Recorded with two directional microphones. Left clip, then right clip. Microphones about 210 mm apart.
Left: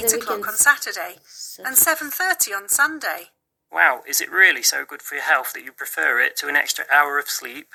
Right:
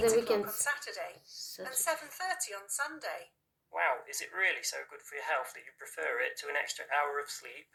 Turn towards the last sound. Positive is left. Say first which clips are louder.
# left 15 dB
turn(degrees=45)  # may be behind; listen again after turning